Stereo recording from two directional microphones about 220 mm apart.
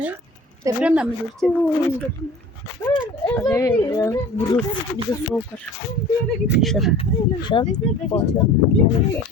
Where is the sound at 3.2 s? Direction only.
15° left (ahead or behind).